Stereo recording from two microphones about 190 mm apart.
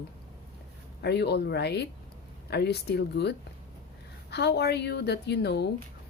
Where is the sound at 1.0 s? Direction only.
60° left (ahead or behind).